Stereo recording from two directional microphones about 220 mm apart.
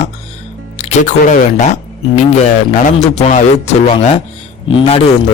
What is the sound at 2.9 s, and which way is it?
A man's voice, 30° left (ahead or behind).